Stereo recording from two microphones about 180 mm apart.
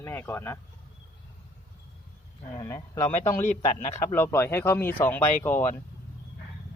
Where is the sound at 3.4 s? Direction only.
40° left (ahead or behind).